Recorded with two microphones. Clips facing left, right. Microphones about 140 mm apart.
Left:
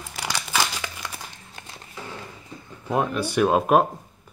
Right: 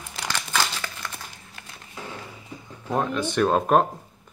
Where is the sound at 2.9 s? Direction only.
10° left (ahead or behind).